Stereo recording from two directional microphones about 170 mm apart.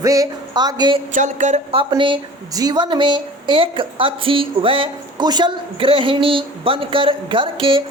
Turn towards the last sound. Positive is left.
turn(degrees=-30)  # may be behind; listen again after turning